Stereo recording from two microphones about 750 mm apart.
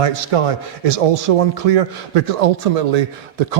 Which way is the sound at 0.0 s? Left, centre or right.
Right.